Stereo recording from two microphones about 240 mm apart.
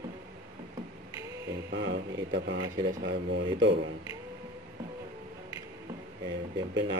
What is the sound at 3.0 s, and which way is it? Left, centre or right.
Speech, right.